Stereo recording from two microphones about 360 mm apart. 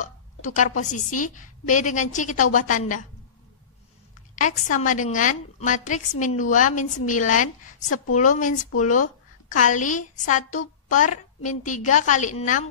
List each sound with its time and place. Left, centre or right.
0.6 s a woman's voice: left
4.4 s a woman's voice: left